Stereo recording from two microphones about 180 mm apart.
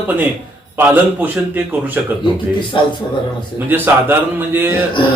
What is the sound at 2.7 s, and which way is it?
Speech, 25° left (ahead or behind).